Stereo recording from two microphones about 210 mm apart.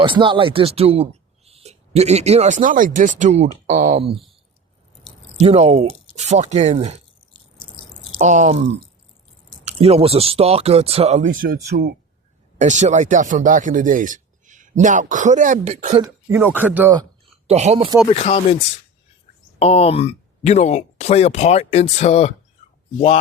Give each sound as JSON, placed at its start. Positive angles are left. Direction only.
{"t": 0.0, "sound": "speech", "side_deg": -25}
{"t": 5.4, "sound": "speech", "side_deg": -30}
{"t": 8.2, "sound": "speech", "side_deg": -35}
{"t": 11.3, "sound": "speech", "side_deg": -45}
{"t": 12.5, "sound": "speech", "side_deg": -35}
{"t": 16.0, "sound": "speech", "side_deg": -10}
{"t": 17.4, "sound": "speech", "side_deg": -30}
{"t": 18.1, "sound": "speech", "side_deg": 30}
{"t": 19.5, "sound": "speech", "side_deg": 30}